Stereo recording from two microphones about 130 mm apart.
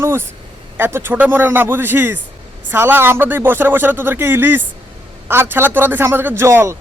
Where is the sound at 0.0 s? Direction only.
15° right (ahead or behind).